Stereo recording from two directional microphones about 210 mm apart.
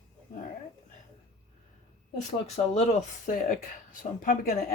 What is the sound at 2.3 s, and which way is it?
Speech, 30° left (ahead or behind).